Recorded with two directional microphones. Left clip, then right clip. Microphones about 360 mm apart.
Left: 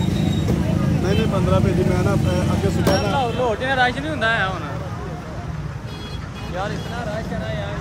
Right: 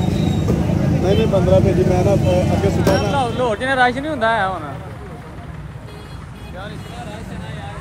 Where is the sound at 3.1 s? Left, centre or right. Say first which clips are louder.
Right 2 dB; centre.